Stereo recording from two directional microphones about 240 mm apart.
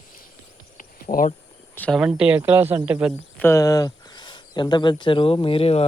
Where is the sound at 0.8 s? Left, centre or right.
Left.